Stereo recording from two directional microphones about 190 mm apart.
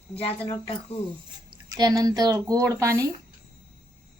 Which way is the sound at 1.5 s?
20° right (ahead or behind).